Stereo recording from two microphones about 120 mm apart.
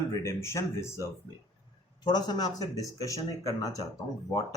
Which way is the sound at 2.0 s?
35° left (ahead or behind).